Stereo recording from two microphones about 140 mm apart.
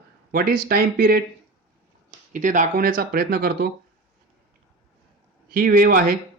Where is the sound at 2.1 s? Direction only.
65° right (ahead or behind); by 3.7 s 90° right.